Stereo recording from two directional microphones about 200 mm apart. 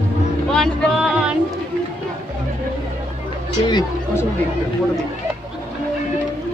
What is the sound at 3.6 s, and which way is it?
Speech, 20° left (ahead or behind).